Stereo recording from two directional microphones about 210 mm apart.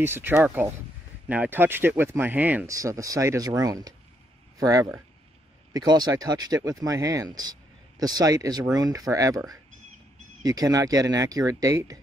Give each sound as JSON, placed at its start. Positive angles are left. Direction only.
{"t": 0.0, "sound": "speech", "side_deg": -10}